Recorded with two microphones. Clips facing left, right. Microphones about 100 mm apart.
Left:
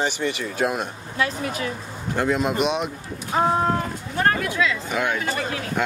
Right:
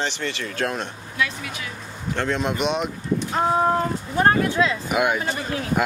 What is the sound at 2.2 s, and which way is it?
Speech, 5° left (ahead or behind).